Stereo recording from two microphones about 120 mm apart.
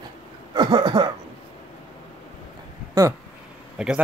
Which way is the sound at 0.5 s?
40° right (ahead or behind).